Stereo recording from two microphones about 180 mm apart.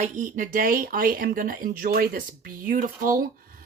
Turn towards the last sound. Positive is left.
turn(degrees=-45)  # may be behind; listen again after turning